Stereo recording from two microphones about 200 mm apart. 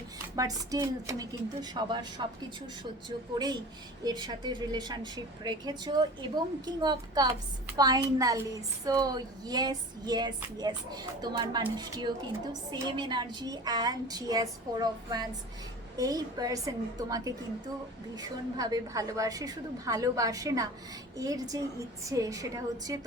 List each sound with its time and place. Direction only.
0.3 s speech: 15° right (ahead or behind)
3.3 s a woman's voice: 20° right (ahead or behind)